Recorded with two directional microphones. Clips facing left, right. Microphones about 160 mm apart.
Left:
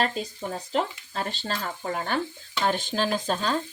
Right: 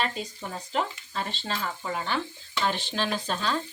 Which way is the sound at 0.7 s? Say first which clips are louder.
Left 1 dB; 45° left (ahead or behind).